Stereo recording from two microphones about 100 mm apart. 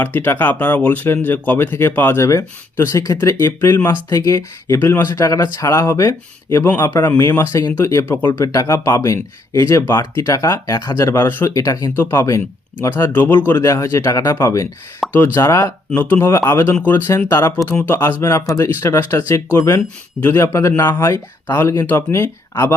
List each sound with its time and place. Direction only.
0.0 s speech: 20° left (ahead or behind)